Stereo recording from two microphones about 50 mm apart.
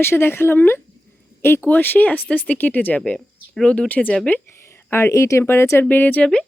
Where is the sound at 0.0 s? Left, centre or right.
Left.